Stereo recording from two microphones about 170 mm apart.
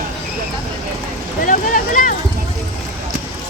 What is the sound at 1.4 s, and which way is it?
Speech, 50° left (ahead or behind).